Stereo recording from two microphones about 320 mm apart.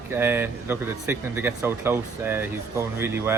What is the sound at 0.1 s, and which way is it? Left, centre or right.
Speech, centre.